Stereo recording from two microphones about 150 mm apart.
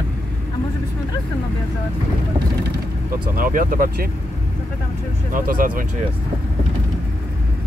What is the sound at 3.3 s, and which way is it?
Speech, 70° right (ahead or behind).